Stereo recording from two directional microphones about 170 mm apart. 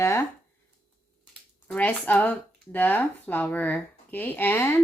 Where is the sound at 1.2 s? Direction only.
5° left (ahead or behind).